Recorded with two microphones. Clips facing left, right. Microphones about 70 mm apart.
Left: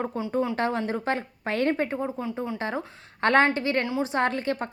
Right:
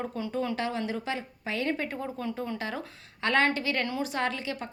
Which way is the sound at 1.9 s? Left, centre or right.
Left.